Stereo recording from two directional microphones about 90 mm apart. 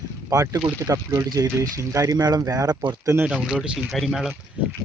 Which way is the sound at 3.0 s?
30° right (ahead or behind).